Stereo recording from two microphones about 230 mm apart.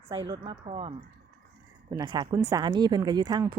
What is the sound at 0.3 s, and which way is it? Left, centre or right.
Speech, right.